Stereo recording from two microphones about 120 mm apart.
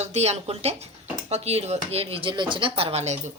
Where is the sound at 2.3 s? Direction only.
40° right (ahead or behind); by 3.3 s 70° right (ahead or behind).